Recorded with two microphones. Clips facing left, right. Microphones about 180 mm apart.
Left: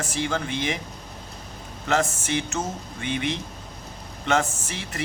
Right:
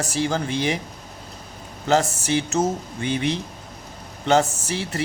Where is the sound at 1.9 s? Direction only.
35° right (ahead or behind).